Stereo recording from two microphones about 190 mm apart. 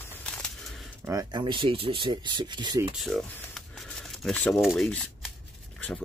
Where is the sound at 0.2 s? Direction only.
Centre (ahead or behind).